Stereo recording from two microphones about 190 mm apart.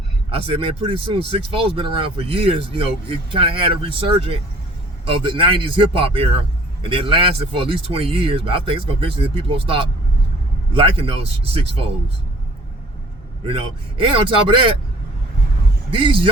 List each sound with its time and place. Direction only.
0.3 s speech: 30° right (ahead or behind)
13.5 s speech: 30° right (ahead or behind)
15.9 s speech: 25° right (ahead or behind)